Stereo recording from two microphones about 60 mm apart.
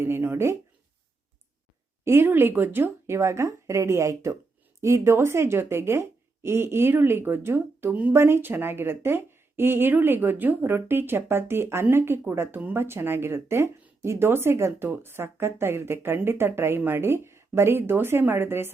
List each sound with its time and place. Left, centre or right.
2.2 s a woman's voice: right